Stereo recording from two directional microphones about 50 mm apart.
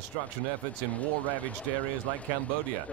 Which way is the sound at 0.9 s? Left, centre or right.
Left.